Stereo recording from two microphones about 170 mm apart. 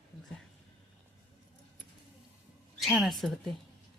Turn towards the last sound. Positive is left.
turn(degrees=0)  # may be behind; listen again after turning